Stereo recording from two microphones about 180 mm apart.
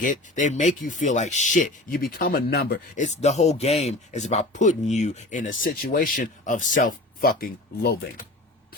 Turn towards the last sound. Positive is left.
turn(degrees=55)  # may be behind; listen again after turning